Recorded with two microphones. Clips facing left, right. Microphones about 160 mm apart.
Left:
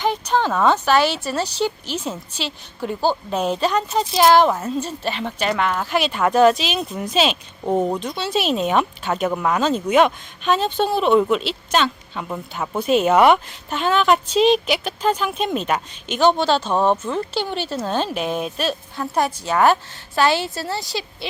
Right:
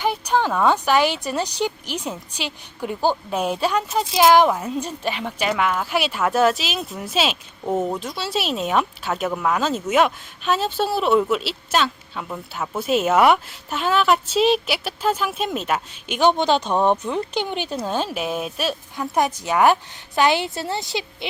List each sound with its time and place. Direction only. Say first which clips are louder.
0.0 s speech: left 1 dB; 10° right (ahead or behind)
7.6 s speech: left 3 dB; 10° left (ahead or behind)
7.9 s speech: left 3 dB; centre (ahead or behind)
12.3 s speech: left 2 dB; 5° left (ahead or behind)
12.7 s speech: left 3 dB; 5° right (ahead or behind); by 21.2 s 20° right (ahead or behind)